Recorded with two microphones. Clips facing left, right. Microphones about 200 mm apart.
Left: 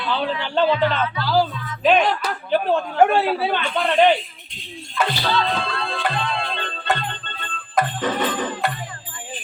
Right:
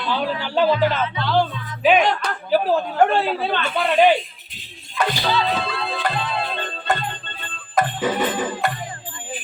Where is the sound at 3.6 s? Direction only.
5° right (ahead or behind).